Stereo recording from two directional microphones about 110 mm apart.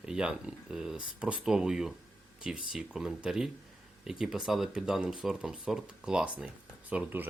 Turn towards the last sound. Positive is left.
turn(degrees=-15)  # may be behind; listen again after turning